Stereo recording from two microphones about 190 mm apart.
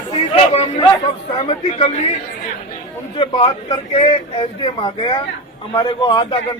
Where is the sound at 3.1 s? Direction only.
25° left (ahead or behind).